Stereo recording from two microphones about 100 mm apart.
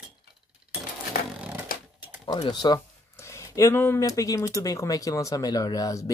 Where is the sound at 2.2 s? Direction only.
50° left (ahead or behind).